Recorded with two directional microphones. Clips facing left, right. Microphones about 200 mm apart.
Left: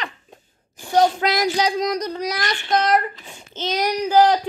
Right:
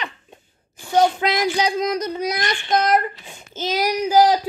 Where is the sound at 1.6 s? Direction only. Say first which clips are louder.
Even; 5° right (ahead or behind).